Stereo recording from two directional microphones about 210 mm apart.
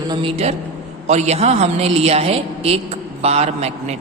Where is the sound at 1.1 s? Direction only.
30° right (ahead or behind).